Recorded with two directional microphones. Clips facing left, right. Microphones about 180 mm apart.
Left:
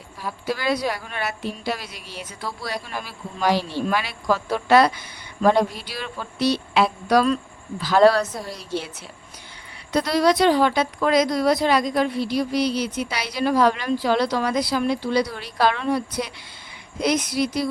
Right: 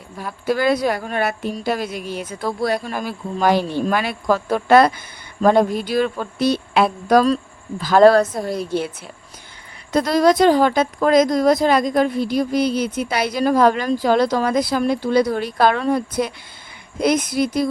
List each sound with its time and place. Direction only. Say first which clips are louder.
0.4 s a woman's voice: right 6 dB; 50° right (ahead or behind)
9.9 s a woman's voice: right 4 dB; 45° right (ahead or behind)